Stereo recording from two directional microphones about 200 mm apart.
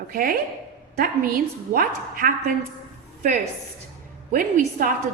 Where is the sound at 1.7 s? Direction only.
45° right (ahead or behind).